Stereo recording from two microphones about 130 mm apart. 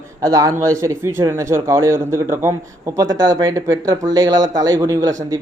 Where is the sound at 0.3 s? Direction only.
25° right (ahead or behind).